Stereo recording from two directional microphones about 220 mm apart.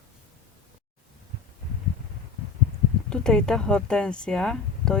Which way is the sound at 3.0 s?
5° left (ahead or behind).